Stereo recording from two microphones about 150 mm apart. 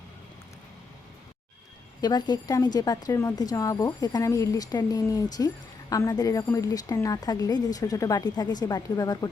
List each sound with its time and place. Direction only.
2.0 s speech: 25° left (ahead or behind)